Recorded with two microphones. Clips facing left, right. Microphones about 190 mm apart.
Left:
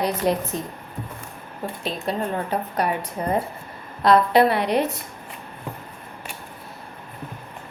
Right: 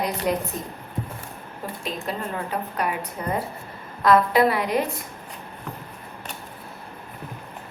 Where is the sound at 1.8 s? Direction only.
30° left (ahead or behind).